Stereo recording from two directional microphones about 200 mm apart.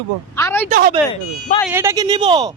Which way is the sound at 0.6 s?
45° right (ahead or behind).